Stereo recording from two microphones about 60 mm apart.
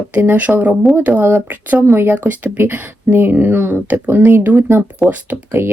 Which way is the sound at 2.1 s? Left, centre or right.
Right.